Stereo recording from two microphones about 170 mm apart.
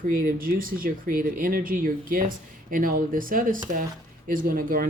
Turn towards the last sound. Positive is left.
turn(degrees=-55)  # may be behind; listen again after turning